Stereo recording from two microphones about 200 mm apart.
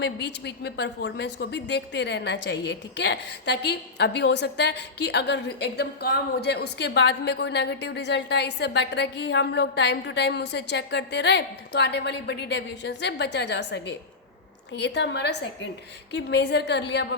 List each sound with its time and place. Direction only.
0.0 s a woman's voice: 55° left (ahead or behind)